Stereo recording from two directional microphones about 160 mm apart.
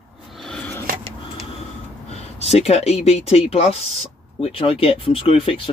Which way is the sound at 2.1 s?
40° left (ahead or behind).